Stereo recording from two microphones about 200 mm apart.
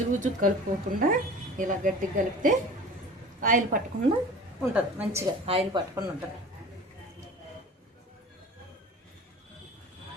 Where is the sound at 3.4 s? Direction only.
40° right (ahead or behind).